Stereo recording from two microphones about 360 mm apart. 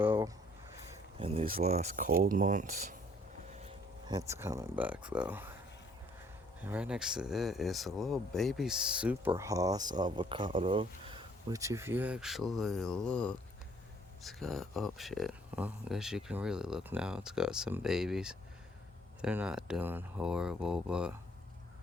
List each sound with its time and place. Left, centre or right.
0.0 s a sound: centre
1.2 s speech: centre
4.0 s speech: centre
6.6 s speech: centre